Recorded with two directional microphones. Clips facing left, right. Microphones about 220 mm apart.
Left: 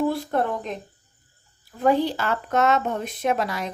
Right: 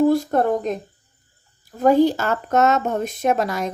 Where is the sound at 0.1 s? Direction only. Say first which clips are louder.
Right 6 dB; 45° right (ahead or behind).